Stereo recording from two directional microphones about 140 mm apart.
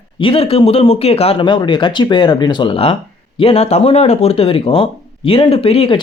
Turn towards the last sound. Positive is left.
turn(degrees=40)  # may be behind; listen again after turning